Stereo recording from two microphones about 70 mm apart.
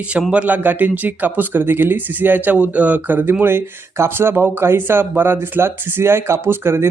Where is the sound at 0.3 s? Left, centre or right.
Right.